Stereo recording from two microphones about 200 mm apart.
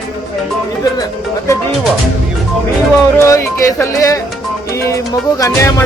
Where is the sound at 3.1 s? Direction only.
15° left (ahead or behind).